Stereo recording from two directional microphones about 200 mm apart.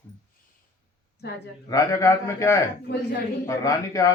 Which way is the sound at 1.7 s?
15° left (ahead or behind).